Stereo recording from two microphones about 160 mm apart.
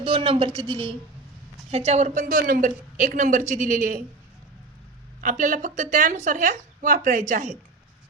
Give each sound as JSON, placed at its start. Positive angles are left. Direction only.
{"t": 0.0, "sound": "speech", "side_deg": -35}
{"t": 1.7, "sound": "speech", "side_deg": -40}
{"t": 5.2, "sound": "speech", "side_deg": -55}